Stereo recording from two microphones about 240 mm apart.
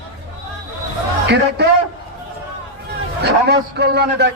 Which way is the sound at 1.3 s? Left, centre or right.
Right.